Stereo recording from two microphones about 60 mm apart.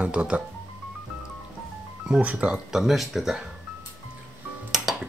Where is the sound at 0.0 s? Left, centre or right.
Right.